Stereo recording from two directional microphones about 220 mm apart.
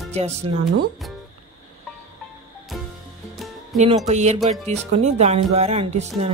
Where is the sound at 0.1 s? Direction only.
30° right (ahead or behind).